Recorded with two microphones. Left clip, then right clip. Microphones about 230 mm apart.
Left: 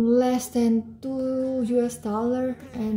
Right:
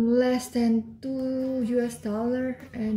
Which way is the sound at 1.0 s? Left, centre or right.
Right.